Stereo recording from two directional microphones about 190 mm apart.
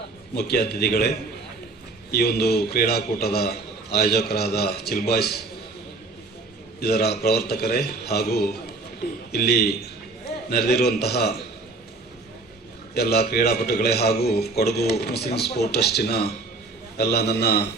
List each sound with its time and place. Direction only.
0.3 s a man's voice: 55° left (ahead or behind)
2.1 s a man's voice: 55° left (ahead or behind)
6.7 s a man's voice: 55° left (ahead or behind)
12.9 s a man's voice: 55° left (ahead or behind)